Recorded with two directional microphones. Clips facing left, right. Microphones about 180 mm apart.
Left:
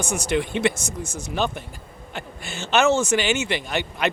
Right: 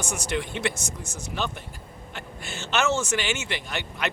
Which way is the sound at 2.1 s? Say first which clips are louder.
Left 4 dB; 15° left (ahead or behind).